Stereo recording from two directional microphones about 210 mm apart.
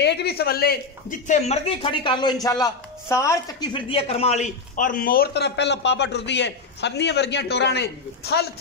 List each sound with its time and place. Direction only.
0.0 s a man's voice: 50° left (ahead or behind)
1.2 s speech: 30° left (ahead or behind); by 8.5 s 50° left (ahead or behind)